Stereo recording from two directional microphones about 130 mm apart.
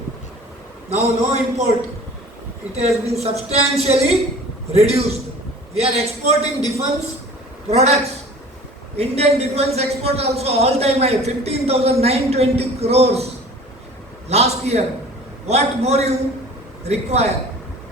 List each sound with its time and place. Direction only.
0.9 s a man's voice: 55° right (ahead or behind)
2.7 s a man's voice: 55° right (ahead or behind)
14.3 s a man's voice: 55° right (ahead or behind)